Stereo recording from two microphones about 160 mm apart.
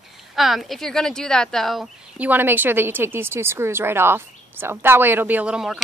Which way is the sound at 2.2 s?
10° right (ahead or behind).